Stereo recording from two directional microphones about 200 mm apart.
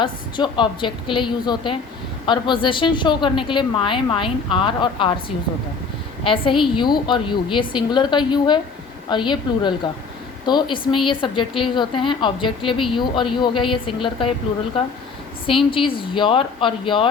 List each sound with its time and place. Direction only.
0.0 s a woman's voice: 25° left (ahead or behind)
6.2 s a woman's voice: 25° left (ahead or behind)